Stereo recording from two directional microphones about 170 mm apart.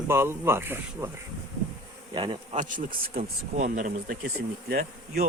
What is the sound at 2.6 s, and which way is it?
Speech, 50° right (ahead or behind).